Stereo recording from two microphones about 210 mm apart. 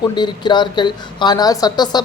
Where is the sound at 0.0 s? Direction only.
20° left (ahead or behind).